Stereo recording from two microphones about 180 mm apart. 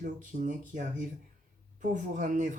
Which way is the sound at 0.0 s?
50° right (ahead or behind).